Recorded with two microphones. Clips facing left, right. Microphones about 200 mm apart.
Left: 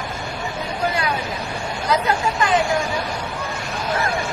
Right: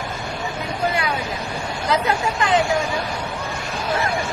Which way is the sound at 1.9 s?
25° right (ahead or behind).